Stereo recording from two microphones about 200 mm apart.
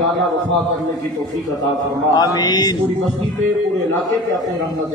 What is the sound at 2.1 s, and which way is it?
Speech, 20° left (ahead or behind).